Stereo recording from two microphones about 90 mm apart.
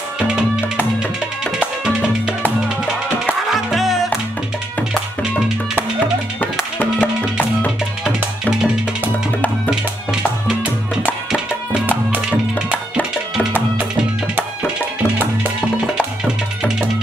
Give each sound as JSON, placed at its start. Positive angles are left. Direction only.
{"t": 1.6, "sound": "music", "side_deg": -10}
{"t": 3.4, "sound": "music", "side_deg": 0}
{"t": 6.8, "sound": "music", "side_deg": 15}
{"t": 10.5, "sound": "music", "side_deg": -15}